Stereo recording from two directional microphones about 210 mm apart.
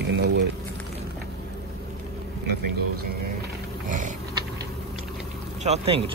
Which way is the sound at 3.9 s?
35° right (ahead or behind).